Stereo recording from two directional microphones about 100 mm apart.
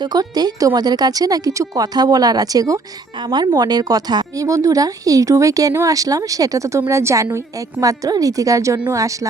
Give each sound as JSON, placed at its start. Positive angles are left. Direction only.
{"t": 0.0, "sound": "a woman's voice", "side_deg": -45}
{"t": 3.2, "sound": "a woman's voice", "side_deg": -50}